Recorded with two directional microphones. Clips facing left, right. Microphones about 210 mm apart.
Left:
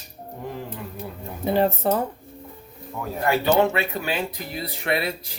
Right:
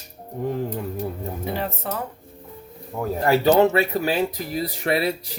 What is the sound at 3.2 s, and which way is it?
Speech, 40° right (ahead or behind).